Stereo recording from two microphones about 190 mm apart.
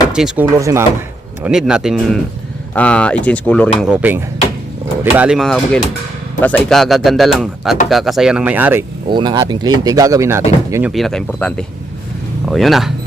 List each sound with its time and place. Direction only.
0.1 s speech: 5° right (ahead or behind)
0.6 s speech: 15° right (ahead or behind)
1.4 s speech: 5° right (ahead or behind)
3.8 s speech: 5° right (ahead or behind)
9.0 s speech: 25° right (ahead or behind)
10.9 s speech: centre (ahead or behind)